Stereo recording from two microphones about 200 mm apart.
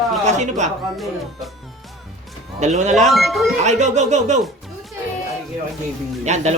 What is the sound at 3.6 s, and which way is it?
Speech, 35° right (ahead or behind).